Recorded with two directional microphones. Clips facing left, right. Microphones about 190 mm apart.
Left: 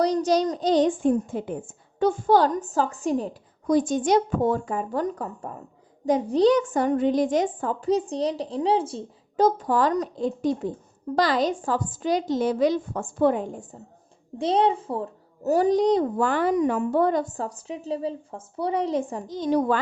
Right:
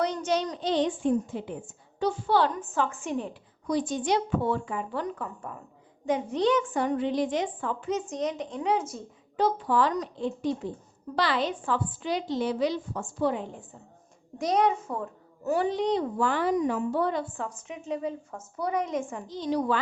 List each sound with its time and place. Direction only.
0.0 s a woman's voice: 35° left (ahead or behind)
9.4 s a woman's voice: 45° left (ahead or behind)
14.3 s a child's voice: 30° left (ahead or behind); by 19.8 s 50° left (ahead or behind)